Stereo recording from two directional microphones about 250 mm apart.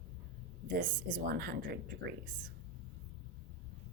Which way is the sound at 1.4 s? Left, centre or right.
Right.